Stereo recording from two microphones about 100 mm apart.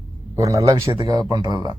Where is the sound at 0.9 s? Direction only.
45° right (ahead or behind).